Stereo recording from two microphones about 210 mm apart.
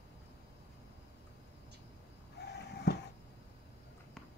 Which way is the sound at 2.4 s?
50° left (ahead or behind).